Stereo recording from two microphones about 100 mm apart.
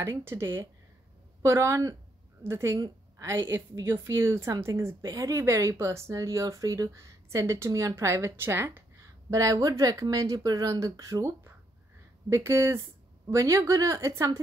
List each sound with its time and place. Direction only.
0.0 s a woman's voice: 25° right (ahead or behind)